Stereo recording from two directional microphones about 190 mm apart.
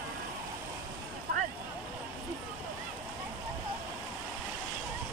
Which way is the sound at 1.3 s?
50° right (ahead or behind).